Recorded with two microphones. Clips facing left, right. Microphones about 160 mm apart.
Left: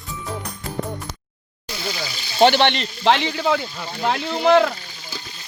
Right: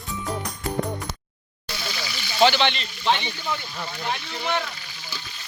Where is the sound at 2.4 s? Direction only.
60° left (ahead or behind); by 4.7 s 90° left.